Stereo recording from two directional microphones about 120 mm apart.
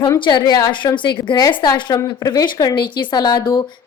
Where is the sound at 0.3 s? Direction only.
35° left (ahead or behind).